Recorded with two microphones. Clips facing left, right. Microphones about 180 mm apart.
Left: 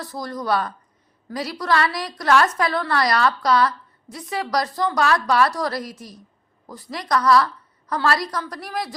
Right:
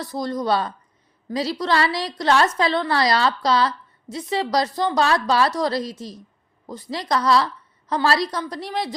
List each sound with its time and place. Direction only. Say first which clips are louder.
0.0 s a woman's voice: right 4 dB; 20° right (ahead or behind)